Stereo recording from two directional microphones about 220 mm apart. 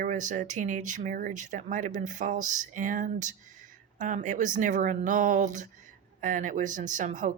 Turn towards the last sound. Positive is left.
turn(degrees=-35)  # may be behind; listen again after turning